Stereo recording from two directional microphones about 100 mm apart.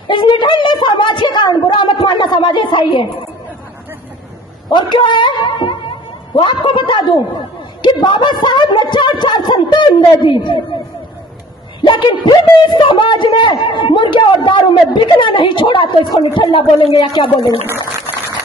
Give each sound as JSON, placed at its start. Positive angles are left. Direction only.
{"t": 0.1, "sound": "a sound", "side_deg": 50}
{"t": 4.6, "sound": "speech", "side_deg": 50}
{"t": 11.8, "sound": "speech", "side_deg": 55}